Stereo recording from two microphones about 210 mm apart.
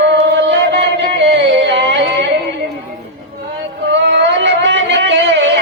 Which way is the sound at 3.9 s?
60° right (ahead or behind).